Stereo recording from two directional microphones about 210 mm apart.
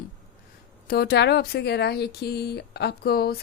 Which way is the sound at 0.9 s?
50° left (ahead or behind).